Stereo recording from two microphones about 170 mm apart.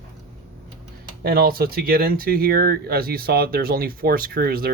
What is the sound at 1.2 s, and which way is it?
Speech, 60° right (ahead or behind).